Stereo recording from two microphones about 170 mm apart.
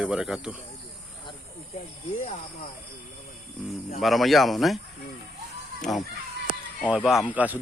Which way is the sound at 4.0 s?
Centre (ahead or behind).